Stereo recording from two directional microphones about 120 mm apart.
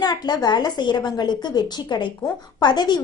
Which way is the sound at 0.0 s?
35° left (ahead or behind).